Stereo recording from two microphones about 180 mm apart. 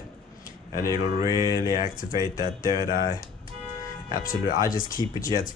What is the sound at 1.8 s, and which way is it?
Speech, 50° left (ahead or behind).